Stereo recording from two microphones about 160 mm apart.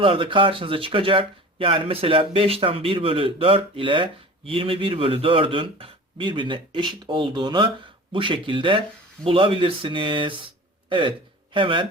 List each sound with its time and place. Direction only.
0.0 s speech: 35° right (ahead or behind)